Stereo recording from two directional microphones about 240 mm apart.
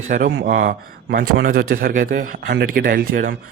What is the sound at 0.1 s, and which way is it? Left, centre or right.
Speech, right.